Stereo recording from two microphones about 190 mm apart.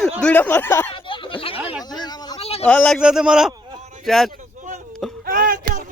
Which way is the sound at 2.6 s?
5° left (ahead or behind).